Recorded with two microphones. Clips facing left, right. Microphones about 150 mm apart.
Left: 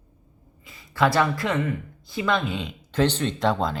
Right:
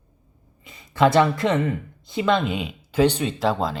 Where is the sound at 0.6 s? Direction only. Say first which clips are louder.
Right 4 dB; 20° right (ahead or behind).